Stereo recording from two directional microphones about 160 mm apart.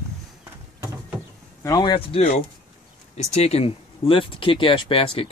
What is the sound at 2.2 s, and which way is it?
Speech, 45° left (ahead or behind).